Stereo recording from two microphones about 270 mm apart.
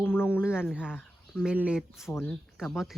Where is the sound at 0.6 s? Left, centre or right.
Centre.